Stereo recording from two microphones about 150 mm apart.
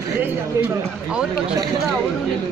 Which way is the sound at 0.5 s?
20° right (ahead or behind).